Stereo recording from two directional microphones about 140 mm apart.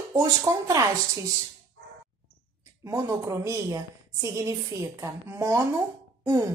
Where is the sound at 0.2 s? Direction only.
25° right (ahead or behind).